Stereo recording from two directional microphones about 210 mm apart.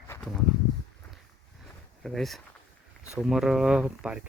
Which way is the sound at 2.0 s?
Centre (ahead or behind).